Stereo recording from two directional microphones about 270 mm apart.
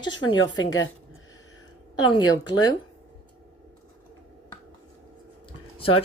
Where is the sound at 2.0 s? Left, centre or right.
Centre.